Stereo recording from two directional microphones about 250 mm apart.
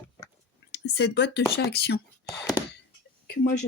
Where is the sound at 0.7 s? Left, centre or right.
Left.